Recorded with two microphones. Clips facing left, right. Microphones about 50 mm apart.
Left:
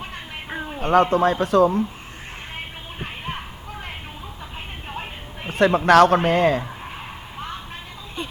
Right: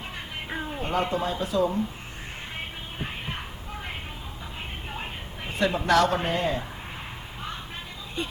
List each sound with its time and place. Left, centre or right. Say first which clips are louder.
0.5 s a sound: left 2 dB; centre
0.8 s speech: left 11 dB; left
5.5 s a man's voice: left 8 dB; left